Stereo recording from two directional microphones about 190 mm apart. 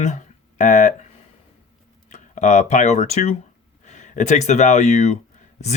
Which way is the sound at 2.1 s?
40° left (ahead or behind).